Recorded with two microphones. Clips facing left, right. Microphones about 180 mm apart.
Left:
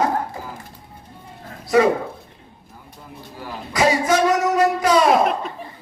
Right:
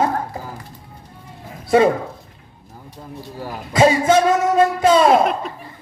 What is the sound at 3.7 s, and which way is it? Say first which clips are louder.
Speech: right 4 dB; 25° right (ahead or behind).